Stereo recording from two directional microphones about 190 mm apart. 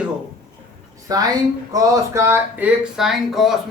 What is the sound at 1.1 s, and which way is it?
Speech, 20° right (ahead or behind).